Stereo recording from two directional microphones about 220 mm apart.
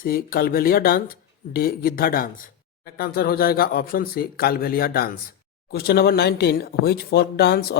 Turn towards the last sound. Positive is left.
turn(degrees=45)  # may be behind; listen again after turning